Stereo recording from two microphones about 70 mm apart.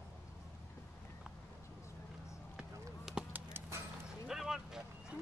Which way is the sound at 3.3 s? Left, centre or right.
Right.